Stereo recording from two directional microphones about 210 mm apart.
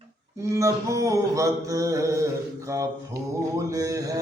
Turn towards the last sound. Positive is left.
turn(degrees=-15)  # may be behind; listen again after turning